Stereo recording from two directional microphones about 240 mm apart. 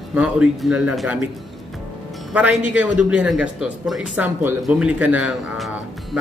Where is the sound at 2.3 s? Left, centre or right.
Centre.